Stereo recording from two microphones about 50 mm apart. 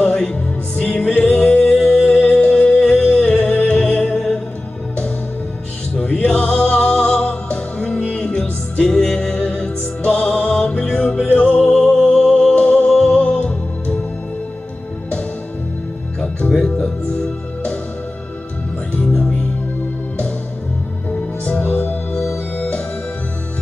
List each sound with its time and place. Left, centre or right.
0.0 s music: left
1.1 s singing: left
1.7 s music: centre
6.0 s music: left
12.6 s music: left
16.2 s music: centre
18.9 s music: left
21.5 s music: left